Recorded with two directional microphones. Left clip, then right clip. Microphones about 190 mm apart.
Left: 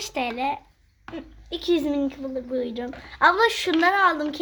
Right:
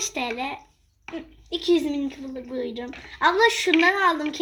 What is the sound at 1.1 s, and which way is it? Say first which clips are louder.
A child's voice: right 2 dB; 20° left (ahead or behind).